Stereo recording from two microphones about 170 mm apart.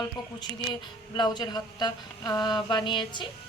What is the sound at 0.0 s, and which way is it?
Speech, 25° left (ahead or behind).